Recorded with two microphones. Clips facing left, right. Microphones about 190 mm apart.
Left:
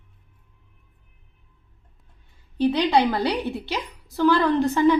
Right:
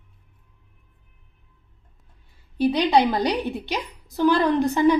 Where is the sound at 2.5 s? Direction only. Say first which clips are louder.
Right 1 dB; 10° right (ahead or behind).